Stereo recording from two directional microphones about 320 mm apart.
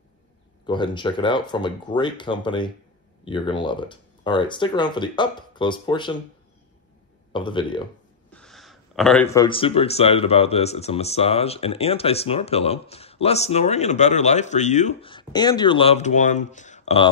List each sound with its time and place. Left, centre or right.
0.7 s speech: centre
7.3 s speech: centre
8.3 s speech: centre